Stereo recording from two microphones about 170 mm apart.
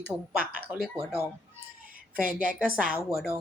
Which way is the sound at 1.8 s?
55° right (ahead or behind).